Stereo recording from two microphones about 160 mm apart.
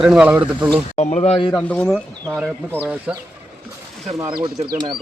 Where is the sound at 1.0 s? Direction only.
45° left (ahead or behind).